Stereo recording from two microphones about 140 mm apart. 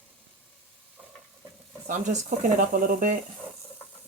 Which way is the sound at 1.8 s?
65° right (ahead or behind).